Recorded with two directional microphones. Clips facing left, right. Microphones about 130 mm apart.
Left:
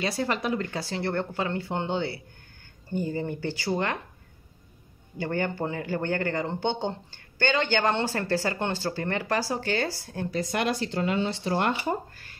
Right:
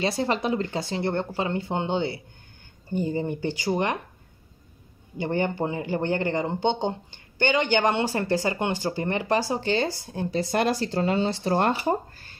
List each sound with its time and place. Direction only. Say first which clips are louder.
0.0 s speech: right 3 dB; 25° right (ahead or behind)
5.1 s speech: right 3 dB; 20° right (ahead or behind)